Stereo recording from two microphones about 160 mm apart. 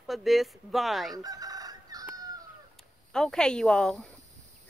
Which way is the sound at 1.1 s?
25° right (ahead or behind).